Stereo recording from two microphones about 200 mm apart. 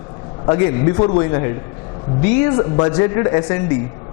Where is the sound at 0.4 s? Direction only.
20° left (ahead or behind).